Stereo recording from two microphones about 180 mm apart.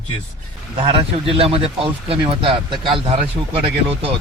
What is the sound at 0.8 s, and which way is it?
Speech, 30° right (ahead or behind).